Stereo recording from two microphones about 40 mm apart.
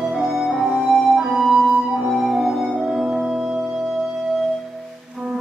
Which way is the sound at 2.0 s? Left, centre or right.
Centre.